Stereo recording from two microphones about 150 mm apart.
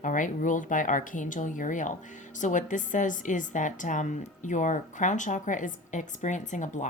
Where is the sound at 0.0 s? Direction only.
60° left (ahead or behind).